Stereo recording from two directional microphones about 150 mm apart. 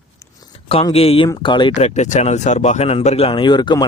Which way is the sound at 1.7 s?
50° left (ahead or behind).